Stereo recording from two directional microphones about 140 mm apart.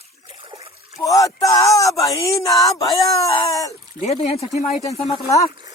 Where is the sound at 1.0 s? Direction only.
25° left (ahead or behind).